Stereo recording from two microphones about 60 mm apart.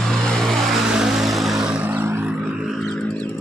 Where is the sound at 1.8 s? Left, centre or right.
Right.